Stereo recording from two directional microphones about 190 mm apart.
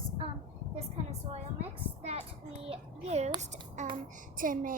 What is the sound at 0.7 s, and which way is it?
Speech, 35° right (ahead or behind).